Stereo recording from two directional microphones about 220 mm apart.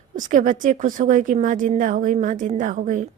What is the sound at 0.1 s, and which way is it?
A woman's voice, 35° right (ahead or behind).